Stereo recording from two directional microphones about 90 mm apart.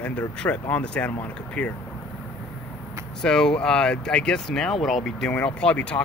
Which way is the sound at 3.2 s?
5° left (ahead or behind).